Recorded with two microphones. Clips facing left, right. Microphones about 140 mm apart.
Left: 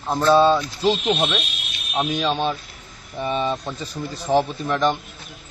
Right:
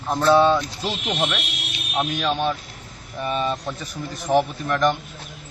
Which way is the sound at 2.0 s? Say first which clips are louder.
Left 1 dB; 10° left (ahead or behind).